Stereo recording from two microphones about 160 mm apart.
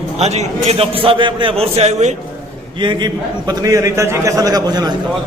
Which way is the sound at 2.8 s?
30° right (ahead or behind).